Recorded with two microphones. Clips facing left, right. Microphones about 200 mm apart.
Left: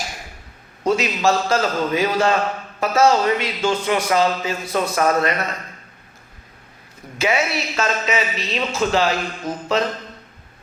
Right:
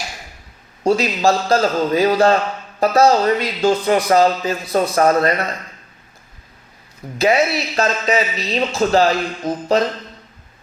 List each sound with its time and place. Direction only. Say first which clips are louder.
0.9 s a man's voice: right 3 dB; 35° right (ahead or behind)
7.2 s a man's voice: right 5 dB; 35° right (ahead or behind)